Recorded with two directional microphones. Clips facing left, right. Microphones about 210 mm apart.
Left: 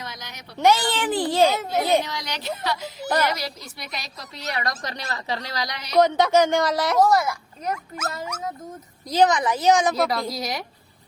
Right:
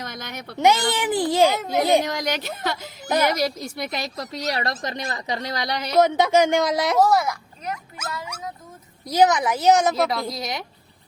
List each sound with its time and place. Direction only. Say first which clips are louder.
0.0 s a sound: right 5 dB; 55° right (ahead or behind)
0.6 s a child's voice: even; 15° right (ahead or behind)
2.0 s a woman's voice: right 4 dB; 45° right (ahead or behind)
3.1 s a child's voice: right 2 dB; 10° right (ahead or behind)
3.3 s a woman's voice: right 8 dB; 50° right (ahead or behind)
4.5 s a woman's voice: right 2 dB; 25° right (ahead or behind)
7.0 s a woman's voice: even; centre (ahead or behind)
7.9 s speech: left 5 dB; 45° left (ahead or behind)
9.0 s a child's voice: right 1 dB; 10° right (ahead or behind)